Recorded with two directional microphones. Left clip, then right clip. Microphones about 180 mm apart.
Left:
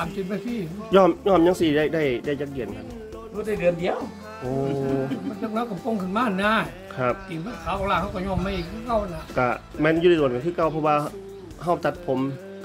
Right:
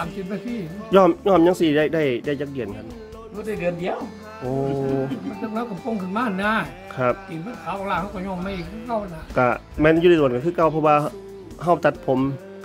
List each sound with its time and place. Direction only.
0.0 s speech: centre (ahead or behind)
0.9 s speech: 25° right (ahead or behind)
3.4 s speech: 5° right (ahead or behind)
7.0 s speech: 25° right (ahead or behind)
7.6 s speech: centre (ahead or behind)
9.3 s speech: 25° right (ahead or behind)